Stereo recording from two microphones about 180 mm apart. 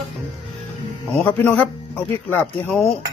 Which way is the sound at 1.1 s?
10° left (ahead or behind).